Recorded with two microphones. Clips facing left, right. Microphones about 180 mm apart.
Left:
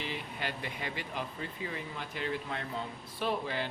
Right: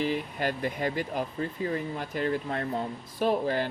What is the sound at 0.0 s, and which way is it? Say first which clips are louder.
Speech: right 10 dB; 45° right (ahead or behind).